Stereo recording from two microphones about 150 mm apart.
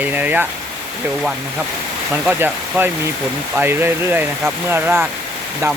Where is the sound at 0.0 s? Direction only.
10° right (ahead or behind).